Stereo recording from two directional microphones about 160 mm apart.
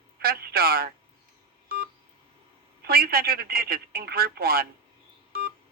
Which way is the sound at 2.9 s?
70° right (ahead or behind).